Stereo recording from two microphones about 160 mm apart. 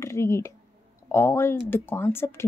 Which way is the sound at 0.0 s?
15° left (ahead or behind).